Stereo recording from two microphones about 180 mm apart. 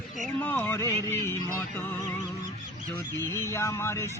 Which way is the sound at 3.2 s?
15° left (ahead or behind).